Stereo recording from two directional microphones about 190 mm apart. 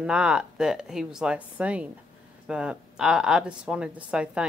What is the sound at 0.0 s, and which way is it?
Speech, 5° right (ahead or behind).